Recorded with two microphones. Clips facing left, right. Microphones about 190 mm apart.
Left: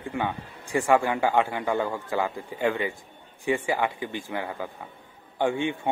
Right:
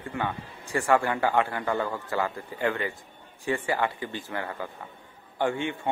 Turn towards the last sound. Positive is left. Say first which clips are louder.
# left 2 dB
turn(degrees=15)  # may be behind; listen again after turning